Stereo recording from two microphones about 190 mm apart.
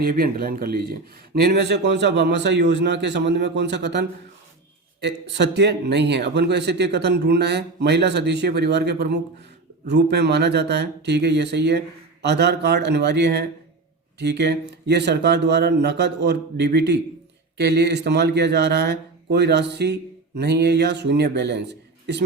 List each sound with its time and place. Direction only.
0.0 s speech: 50° right (ahead or behind)